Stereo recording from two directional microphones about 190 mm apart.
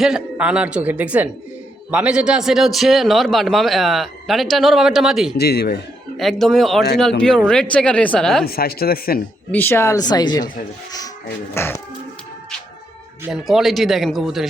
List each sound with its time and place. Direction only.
0.0 s a woman's voice: 5° right (ahead or behind)
5.4 s a man's voice: 55° left (ahead or behind)
6.1 s a man's voice: centre (ahead or behind)
8.4 s speech: 55° left (ahead or behind)
9.5 s speech: 10° left (ahead or behind)
11.5 s speech: 10° left (ahead or behind)
13.2 s a man's voice: centre (ahead or behind)